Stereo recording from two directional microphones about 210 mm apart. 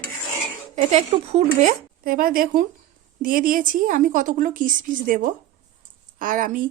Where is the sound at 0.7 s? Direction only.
35° right (ahead or behind).